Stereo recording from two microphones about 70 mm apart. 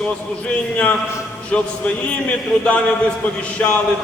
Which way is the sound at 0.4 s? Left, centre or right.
Centre.